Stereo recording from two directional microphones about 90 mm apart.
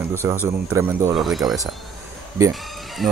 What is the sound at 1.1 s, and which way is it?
Speech, centre (ahead or behind).